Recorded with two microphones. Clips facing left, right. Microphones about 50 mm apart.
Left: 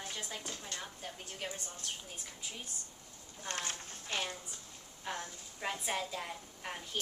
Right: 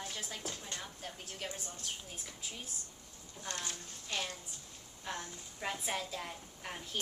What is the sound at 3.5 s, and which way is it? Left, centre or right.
Speech, left.